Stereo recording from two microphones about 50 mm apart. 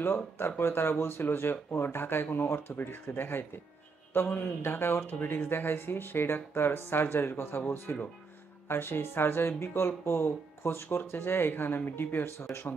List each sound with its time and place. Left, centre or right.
0.0 s speech: left